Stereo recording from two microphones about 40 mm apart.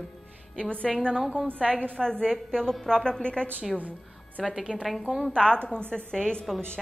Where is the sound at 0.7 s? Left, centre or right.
Left.